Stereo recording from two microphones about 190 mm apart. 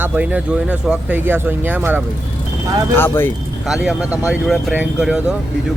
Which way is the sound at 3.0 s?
10° left (ahead or behind).